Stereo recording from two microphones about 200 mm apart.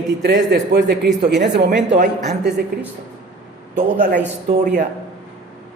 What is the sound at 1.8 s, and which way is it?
Speech, 40° right (ahead or behind).